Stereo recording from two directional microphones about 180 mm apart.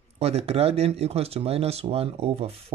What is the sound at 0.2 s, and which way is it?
Speech, 35° right (ahead or behind).